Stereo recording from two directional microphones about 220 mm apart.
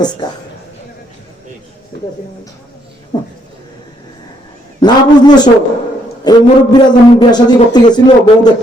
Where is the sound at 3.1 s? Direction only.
20° left (ahead or behind).